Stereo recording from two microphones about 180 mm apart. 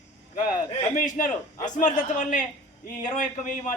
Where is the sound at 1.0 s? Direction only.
50° left (ahead or behind).